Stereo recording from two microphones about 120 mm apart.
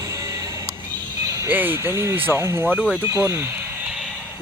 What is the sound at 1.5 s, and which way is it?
Speech, 15° right (ahead or behind).